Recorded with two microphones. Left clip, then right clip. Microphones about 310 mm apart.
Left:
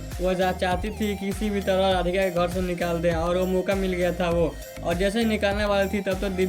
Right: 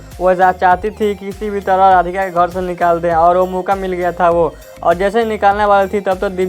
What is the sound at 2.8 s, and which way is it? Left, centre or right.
Speech, right.